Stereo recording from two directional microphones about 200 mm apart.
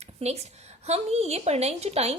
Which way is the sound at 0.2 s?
30° right (ahead or behind).